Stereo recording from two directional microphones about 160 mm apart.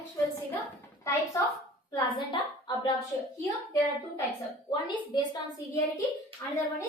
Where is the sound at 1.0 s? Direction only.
20° left (ahead or behind).